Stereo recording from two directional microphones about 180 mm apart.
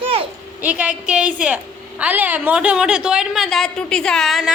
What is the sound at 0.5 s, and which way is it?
A woman's voice, 10° right (ahead or behind).